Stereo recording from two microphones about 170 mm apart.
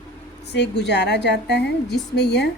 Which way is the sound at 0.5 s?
90° left.